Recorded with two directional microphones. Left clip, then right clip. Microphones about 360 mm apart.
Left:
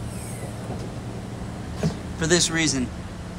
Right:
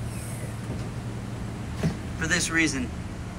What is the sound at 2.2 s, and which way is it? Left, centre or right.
Speech, centre.